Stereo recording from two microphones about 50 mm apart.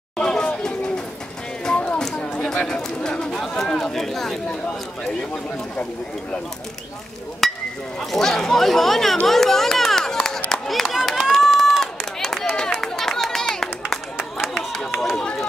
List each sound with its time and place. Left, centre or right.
0.2 s chatter: centre
0.7 s pigeon: centre
1.6 s a sound: centre
2.1 s chatter: left
2.5 s speech: centre
7.4 s speech: centre
9.3 s a sound: centre
11.2 s run: centre
14.1 s run: centre